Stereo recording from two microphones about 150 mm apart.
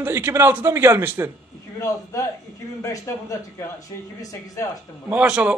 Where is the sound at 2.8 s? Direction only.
20° left (ahead or behind).